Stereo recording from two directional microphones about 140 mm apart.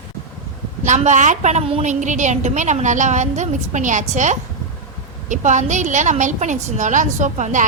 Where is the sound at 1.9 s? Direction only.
60° right (ahead or behind).